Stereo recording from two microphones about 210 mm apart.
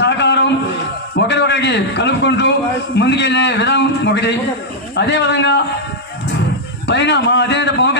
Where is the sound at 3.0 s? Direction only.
55° left (ahead or behind).